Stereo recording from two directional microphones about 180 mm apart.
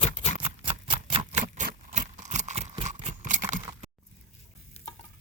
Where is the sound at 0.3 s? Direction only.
30° right (ahead or behind).